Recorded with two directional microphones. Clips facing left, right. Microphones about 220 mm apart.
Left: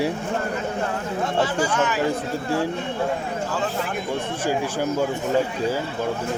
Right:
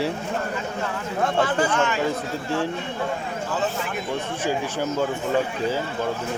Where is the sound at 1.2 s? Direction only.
55° right (ahead or behind).